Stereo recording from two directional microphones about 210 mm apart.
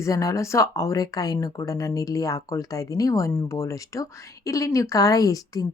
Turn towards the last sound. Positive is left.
turn(degrees=15)  # may be behind; listen again after turning